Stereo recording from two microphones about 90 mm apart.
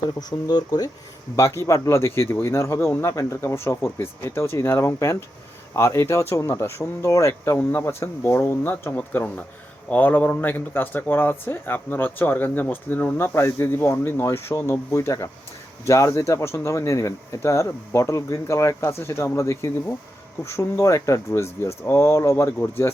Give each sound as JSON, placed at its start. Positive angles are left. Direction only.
{"t": 0.2, "sound": "speech", "side_deg": 50}
{"t": 1.4, "sound": "speech", "side_deg": 35}